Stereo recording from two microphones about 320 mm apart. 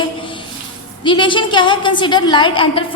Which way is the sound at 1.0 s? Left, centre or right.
Centre.